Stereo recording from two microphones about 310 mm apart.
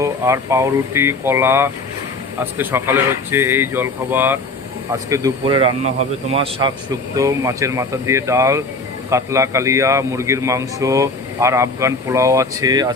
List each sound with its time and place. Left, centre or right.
0.0 s a man's voice: centre